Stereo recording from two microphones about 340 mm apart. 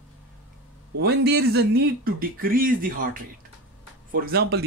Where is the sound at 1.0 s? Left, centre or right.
Right.